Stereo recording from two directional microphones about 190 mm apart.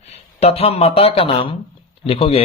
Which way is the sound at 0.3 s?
30° left (ahead or behind).